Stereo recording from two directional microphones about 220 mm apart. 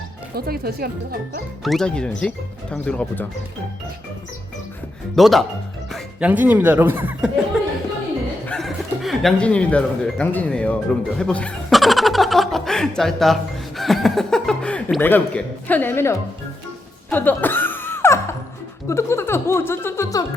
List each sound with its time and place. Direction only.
0.3 s speech: 45° right (ahead or behind)
1.6 s speech: centre (ahead or behind)
5.1 s speech: centre (ahead or behind)
8.4 s speech: centre (ahead or behind)
17.1 s music: 10° left (ahead or behind)
18.9 s speech: 10° left (ahead or behind)